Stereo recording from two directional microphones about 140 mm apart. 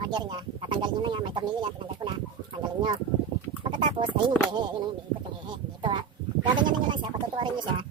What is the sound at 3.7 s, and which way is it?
Speech, 35° right (ahead or behind).